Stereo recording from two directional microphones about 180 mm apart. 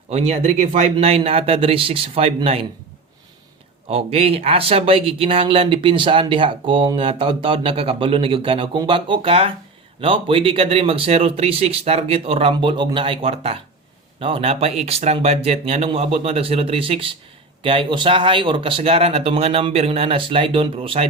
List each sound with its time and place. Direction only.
0.1 s speech: 35° right (ahead or behind)
3.8 s speech: 35° right (ahead or behind)